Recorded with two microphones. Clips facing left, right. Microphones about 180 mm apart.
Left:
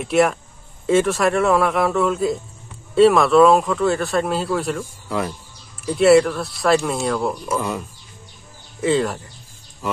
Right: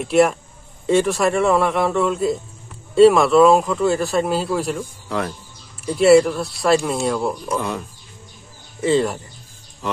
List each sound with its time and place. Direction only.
0.0 s speech: centre (ahead or behind)
8.8 s speech: centre (ahead or behind)